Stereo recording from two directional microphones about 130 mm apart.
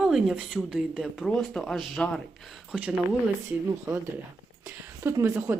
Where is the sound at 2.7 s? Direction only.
5° right (ahead or behind).